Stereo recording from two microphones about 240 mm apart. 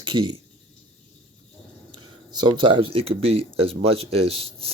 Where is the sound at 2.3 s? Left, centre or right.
Centre.